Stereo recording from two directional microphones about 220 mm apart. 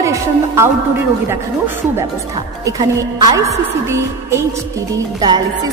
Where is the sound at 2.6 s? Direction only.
15° right (ahead or behind).